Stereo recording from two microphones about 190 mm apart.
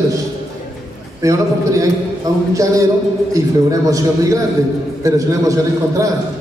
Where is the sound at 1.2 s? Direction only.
15° right (ahead or behind).